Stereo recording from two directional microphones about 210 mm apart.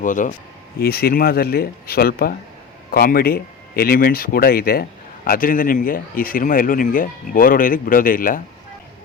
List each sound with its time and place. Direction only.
0.0 s speech: 40° left (ahead or behind)